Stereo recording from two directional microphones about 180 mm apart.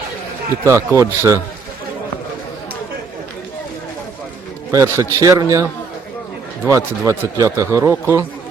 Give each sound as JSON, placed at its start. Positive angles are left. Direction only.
{"t": 0.6, "sound": "speech", "side_deg": -15}
{"t": 4.7, "sound": "speech", "side_deg": -15}
{"t": 6.7, "sound": "speech", "side_deg": -15}